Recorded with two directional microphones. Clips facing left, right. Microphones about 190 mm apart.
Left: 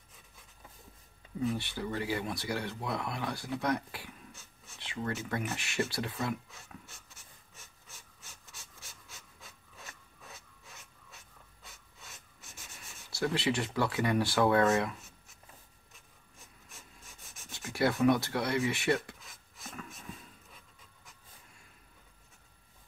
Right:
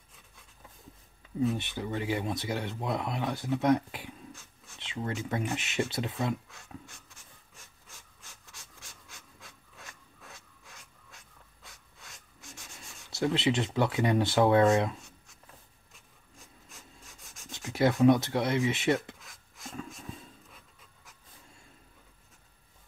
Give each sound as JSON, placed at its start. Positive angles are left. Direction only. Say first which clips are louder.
{"t": 1.5, "sound": "speech", "louder": "right 2 dB", "side_deg": -20}
{"t": 4.3, "sound": "writing", "louder": "right 5 dB", "side_deg": 0}
{"t": 4.7, "sound": "speech", "louder": "right 1 dB", "side_deg": -20}
{"t": 6.9, "sound": "a sound", "louder": "right 1 dB", "side_deg": 0}
{"t": 11.6, "sound": "writing", "louder": "even", "side_deg": 0}
{"t": 13.1, "sound": "speech", "louder": "right 3 dB", "side_deg": -20}
{"t": 15.0, "sound": "a sound", "louder": "right 3 dB", "side_deg": 5}
{"t": 16.6, "sound": "rub", "louder": "even", "side_deg": 0}
{"t": 17.5, "sound": "speech", "louder": "right 3 dB", "side_deg": -20}
{"t": 19.1, "sound": "rub", "louder": "right 1 dB", "side_deg": 0}